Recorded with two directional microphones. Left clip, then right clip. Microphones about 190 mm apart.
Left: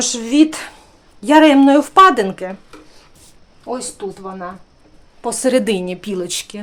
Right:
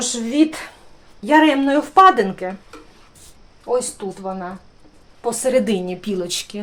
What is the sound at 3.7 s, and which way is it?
Speech, 45° left (ahead or behind).